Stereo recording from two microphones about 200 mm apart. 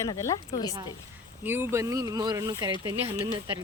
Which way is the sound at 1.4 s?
10° right (ahead or behind).